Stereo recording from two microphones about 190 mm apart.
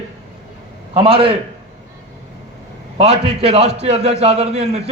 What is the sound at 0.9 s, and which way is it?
Speech, 30° right (ahead or behind).